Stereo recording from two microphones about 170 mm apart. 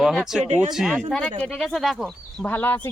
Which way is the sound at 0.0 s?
Centre (ahead or behind).